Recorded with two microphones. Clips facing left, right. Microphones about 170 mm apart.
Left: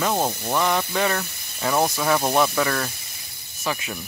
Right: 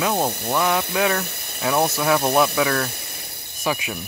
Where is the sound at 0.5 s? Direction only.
Centre (ahead or behind).